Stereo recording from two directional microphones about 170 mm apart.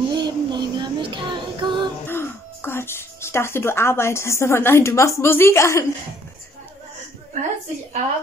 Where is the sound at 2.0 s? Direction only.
15° left (ahead or behind).